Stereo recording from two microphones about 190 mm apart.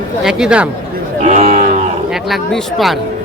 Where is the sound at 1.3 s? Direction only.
35° right (ahead or behind).